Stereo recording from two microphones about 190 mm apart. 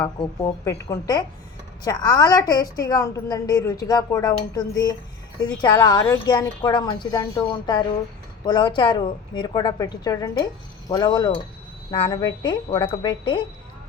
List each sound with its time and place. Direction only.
0.2 s a woman's voice: 15° left (ahead or behind)